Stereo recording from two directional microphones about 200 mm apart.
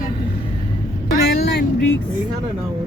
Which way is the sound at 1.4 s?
55° left (ahead or behind).